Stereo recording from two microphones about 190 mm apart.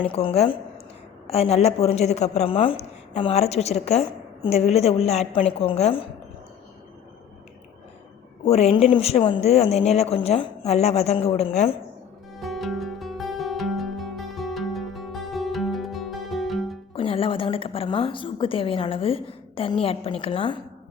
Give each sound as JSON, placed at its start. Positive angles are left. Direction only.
{"t": 0.0, "sound": "a woman's voice", "side_deg": 30}
{"t": 8.4, "sound": "speech", "side_deg": 35}
{"t": 12.4, "sound": "music", "side_deg": 0}
{"t": 16.9, "sound": "a woman's voice", "side_deg": 30}